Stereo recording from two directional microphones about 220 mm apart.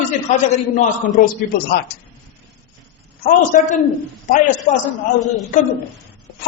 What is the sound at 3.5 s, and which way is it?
Speech, 35° left (ahead or behind).